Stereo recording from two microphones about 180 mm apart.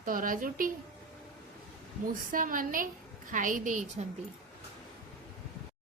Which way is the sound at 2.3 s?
50° right (ahead or behind).